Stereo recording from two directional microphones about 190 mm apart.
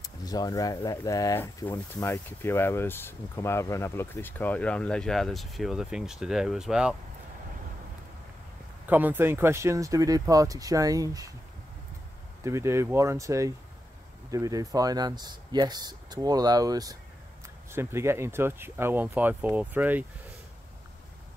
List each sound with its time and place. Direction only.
0.0 s speech: 20° left (ahead or behind); by 7.0 s 5° right (ahead or behind)
8.8 s speech: 10° right (ahead or behind)
12.4 s speech: 15° right (ahead or behind)